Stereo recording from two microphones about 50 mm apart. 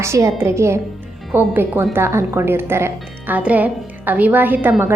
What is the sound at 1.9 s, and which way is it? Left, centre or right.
A woman's voice, right.